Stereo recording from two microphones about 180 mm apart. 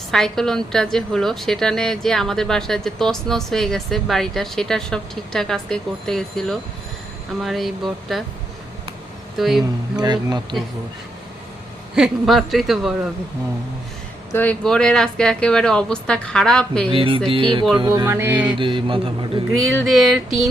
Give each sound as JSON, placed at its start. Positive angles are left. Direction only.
{"t": 0.1, "sound": "a woman's voice", "side_deg": 0}
{"t": 9.4, "sound": "a woman's voice", "side_deg": 0}
{"t": 10.0, "sound": "mantra", "side_deg": -20}
{"t": 11.9, "sound": "a woman's voice", "side_deg": -5}
{"t": 14.3, "sound": "a woman's voice", "side_deg": 5}
{"t": 16.9, "sound": "mantra", "side_deg": -30}
{"t": 17.7, "sound": "music", "side_deg": -20}
{"t": 18.4, "sound": "mantra", "side_deg": -25}
{"t": 19.8, "sound": "a woman's voice", "side_deg": 0}